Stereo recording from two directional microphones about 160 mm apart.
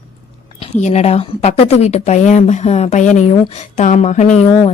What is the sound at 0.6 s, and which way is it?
A woman's voice, 45° left (ahead or behind).